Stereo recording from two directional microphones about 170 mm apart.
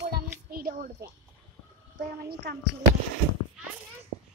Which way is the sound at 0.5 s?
60° right (ahead or behind).